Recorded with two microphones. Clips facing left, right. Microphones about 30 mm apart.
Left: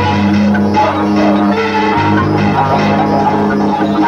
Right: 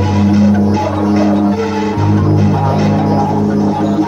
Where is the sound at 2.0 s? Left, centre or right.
Left.